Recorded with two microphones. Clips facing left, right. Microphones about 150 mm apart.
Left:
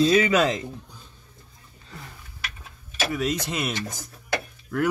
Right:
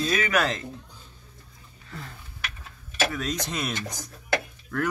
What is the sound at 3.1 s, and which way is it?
Speech, 5° left (ahead or behind).